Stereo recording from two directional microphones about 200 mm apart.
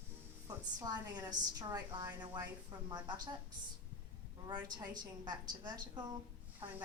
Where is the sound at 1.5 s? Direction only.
20° right (ahead or behind).